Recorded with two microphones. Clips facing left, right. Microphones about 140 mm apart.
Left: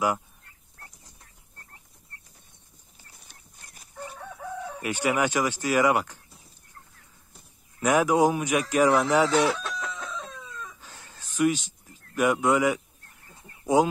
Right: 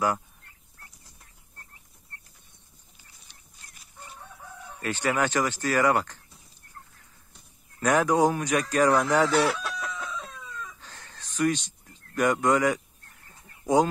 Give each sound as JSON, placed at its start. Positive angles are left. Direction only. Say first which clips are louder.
{"t": 3.3, "sound": "dog", "louder": "left 2 dB", "side_deg": 50}
{"t": 4.8, "sound": "speech", "louder": "left 1 dB", "side_deg": 10}
{"t": 7.8, "sound": "speech", "louder": "left 1 dB", "side_deg": 10}
{"t": 9.6, "sound": "chicken", "louder": "even", "side_deg": -10}
{"t": 10.8, "sound": "a sound", "louder": "even", "side_deg": 10}